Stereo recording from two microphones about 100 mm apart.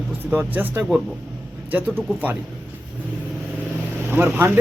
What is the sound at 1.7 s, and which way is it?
Speech, 20° right (ahead or behind).